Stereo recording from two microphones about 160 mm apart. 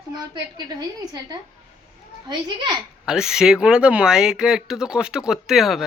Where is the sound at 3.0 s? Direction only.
5° right (ahead or behind).